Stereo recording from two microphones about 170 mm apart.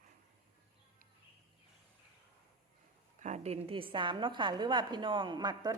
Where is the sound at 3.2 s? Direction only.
40° right (ahead or behind); by 5.8 s 25° right (ahead or behind).